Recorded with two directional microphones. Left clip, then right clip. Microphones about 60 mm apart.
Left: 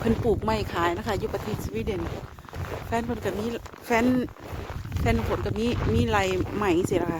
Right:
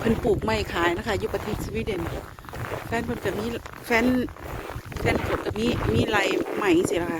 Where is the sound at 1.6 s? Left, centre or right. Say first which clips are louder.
Right 1 dB; left.